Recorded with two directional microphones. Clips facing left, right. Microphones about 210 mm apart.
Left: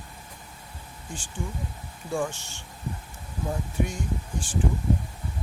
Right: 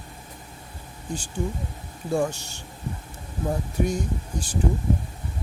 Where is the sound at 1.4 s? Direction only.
40° right (ahead or behind).